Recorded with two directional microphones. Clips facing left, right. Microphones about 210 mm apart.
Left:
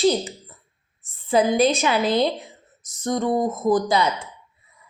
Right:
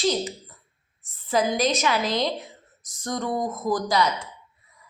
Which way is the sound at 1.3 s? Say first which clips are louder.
Left 5 dB; 30° left (ahead or behind).